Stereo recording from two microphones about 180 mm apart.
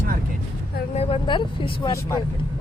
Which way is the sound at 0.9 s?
35° left (ahead or behind).